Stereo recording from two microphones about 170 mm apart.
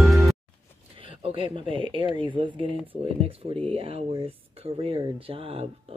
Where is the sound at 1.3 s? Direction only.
30° right (ahead or behind).